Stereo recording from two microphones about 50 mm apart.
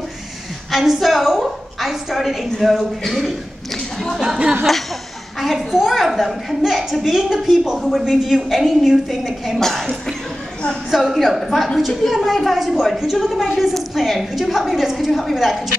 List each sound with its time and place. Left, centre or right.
0.7 s a woman's voice: centre
5.4 s a woman's voice: centre
9.6 s cough: centre
10.9 s a woman's voice: centre